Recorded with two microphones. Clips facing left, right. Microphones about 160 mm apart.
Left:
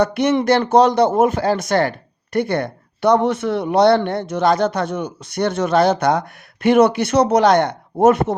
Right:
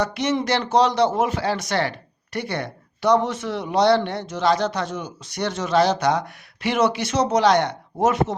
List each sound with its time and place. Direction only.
0.0 s speech: 55° left (ahead or behind)